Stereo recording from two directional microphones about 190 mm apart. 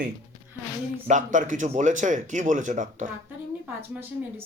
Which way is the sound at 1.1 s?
40° right (ahead or behind).